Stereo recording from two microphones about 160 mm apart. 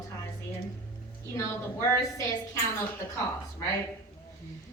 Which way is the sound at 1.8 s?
15° left (ahead or behind).